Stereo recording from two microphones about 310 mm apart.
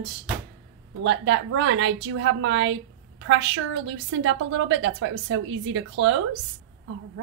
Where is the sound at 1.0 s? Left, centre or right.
Right.